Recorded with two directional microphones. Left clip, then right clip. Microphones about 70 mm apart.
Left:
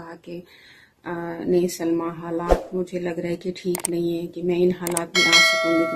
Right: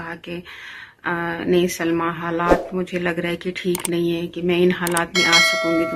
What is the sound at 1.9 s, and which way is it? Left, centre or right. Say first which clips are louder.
Speech: right 3 dB; centre.